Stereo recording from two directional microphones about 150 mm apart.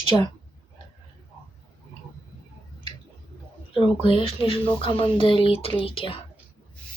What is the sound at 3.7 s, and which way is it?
Speech, 35° left (ahead or behind).